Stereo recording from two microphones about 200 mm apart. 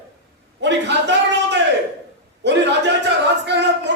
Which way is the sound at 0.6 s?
60° right (ahead or behind).